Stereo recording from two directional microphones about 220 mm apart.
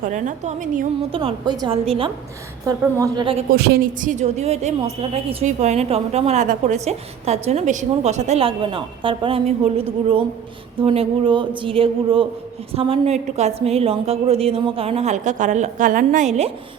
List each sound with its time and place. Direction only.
0.0 s a woman's voice: 35° right (ahead or behind)
2.6 s a woman's voice: 15° right (ahead or behind)
3.5 s a woman's voice: 40° right (ahead or behind)